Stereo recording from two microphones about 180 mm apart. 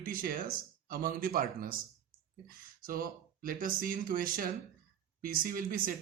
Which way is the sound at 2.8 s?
55° right (ahead or behind).